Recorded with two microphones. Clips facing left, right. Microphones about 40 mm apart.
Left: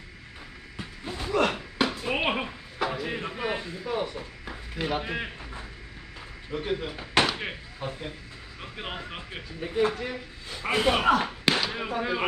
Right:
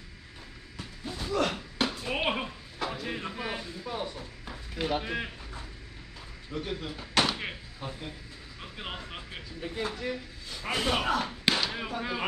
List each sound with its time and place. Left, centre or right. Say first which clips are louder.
0.7 s a sound: left 3 dB; left
4.5 s speech: left 1 dB; centre
6.5 s a woman's voice: left 5 dB; left
10.0 s a woman's voice: even; left
11.6 s speech: left 4 dB; centre